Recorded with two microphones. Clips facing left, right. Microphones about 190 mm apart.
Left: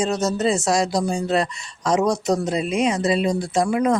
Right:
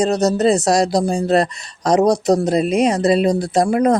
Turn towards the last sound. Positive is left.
turn(degrees=-40)  # may be behind; listen again after turning